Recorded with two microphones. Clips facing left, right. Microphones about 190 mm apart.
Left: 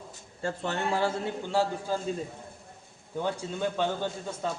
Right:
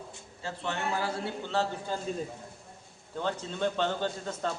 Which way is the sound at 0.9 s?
25° left (ahead or behind).